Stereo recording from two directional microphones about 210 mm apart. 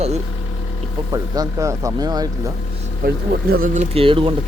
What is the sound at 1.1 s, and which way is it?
Speech, 15° right (ahead or behind).